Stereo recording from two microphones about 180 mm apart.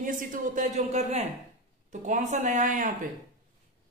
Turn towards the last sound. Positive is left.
turn(degrees=-45)  # may be behind; listen again after turning